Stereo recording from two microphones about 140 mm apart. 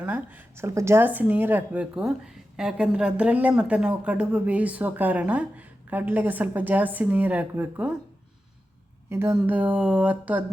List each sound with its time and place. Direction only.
0.0 s speech: 10° right (ahead or behind)
9.0 s a woman's voice: 15° right (ahead or behind)